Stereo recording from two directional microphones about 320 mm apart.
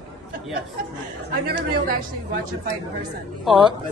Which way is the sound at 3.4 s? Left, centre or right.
Centre.